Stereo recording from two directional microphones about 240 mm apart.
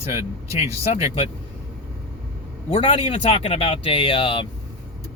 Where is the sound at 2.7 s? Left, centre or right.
Left.